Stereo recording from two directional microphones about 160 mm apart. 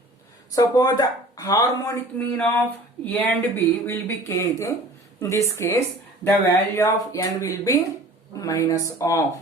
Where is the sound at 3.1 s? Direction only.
15° left (ahead or behind).